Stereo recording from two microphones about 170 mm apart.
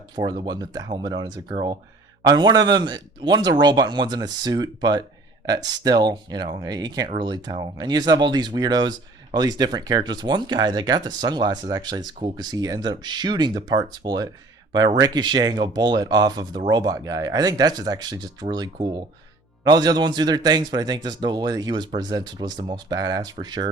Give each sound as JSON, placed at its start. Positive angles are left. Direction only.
{"t": 0.4, "sound": "speech", "side_deg": -25}